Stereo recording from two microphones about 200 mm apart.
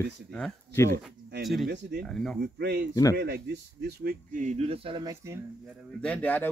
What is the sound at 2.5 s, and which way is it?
Speech, 55° right (ahead or behind).